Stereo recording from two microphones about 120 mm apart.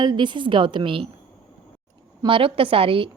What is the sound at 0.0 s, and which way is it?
A woman's voice, 40° right (ahead or behind).